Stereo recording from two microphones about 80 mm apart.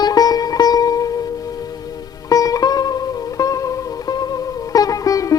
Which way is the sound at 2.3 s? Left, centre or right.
Left.